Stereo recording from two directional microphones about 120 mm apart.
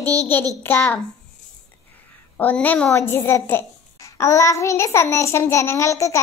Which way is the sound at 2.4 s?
15° left (ahead or behind).